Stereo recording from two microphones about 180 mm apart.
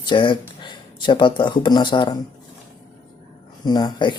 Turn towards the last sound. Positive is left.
turn(degrees=25)  # may be behind; listen again after turning